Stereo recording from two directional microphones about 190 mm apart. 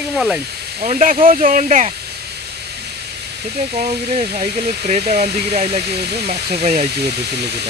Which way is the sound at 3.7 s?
30° right (ahead or behind).